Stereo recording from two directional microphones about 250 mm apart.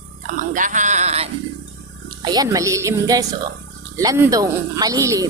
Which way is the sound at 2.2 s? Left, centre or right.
Centre.